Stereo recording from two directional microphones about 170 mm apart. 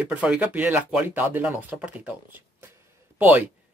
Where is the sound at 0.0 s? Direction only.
10° right (ahead or behind).